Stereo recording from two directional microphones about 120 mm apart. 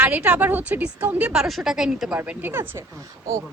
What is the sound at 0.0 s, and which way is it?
A woman's voice, 10° right (ahead or behind).